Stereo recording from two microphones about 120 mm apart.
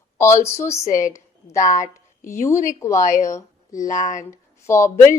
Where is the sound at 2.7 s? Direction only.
25° left (ahead or behind).